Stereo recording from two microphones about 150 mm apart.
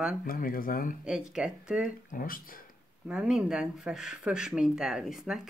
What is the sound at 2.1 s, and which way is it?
Speech, 65° left (ahead or behind).